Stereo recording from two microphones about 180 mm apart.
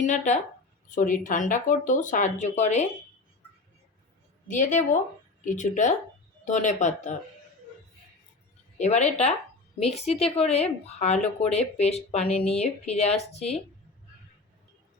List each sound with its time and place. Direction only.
0.0 s speech: 40° left (ahead or behind)
4.4 s speech: 45° left (ahead or behind)
8.8 s speech: 40° left (ahead or behind)